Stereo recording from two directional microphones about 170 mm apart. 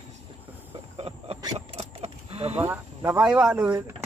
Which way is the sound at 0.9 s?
35° right (ahead or behind).